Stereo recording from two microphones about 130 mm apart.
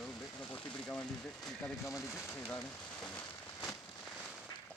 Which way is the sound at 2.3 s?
10° left (ahead or behind).